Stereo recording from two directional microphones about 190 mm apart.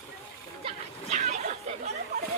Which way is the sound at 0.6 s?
35° right (ahead or behind).